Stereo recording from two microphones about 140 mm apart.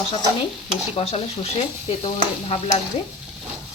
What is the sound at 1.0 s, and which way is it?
Speech, 45° left (ahead or behind).